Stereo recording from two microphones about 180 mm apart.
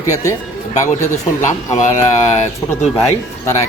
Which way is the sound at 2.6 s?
20° left (ahead or behind).